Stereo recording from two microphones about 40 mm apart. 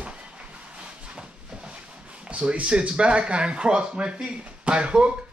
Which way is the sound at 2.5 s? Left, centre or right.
Right.